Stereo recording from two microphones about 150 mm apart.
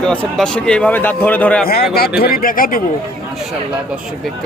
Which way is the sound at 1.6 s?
85° left.